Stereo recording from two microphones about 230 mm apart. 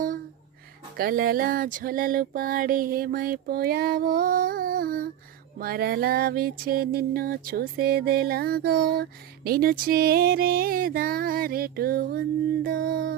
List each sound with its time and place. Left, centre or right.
0.9 s music: right